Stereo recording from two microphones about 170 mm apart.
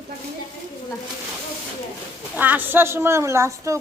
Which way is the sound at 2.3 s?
10° right (ahead or behind).